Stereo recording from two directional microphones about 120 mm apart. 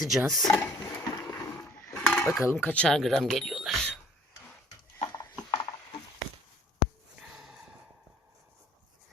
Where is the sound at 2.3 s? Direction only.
25° left (ahead or behind).